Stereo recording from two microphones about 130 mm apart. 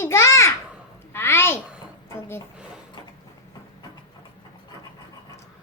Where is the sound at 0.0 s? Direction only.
20° left (ahead or behind).